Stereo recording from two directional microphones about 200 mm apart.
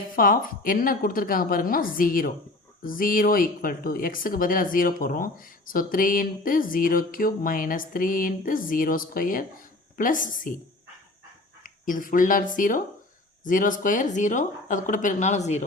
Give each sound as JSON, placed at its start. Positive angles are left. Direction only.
{"t": 0.2, "sound": "speech", "side_deg": 45}
{"t": 11.6, "sound": "speech", "side_deg": 40}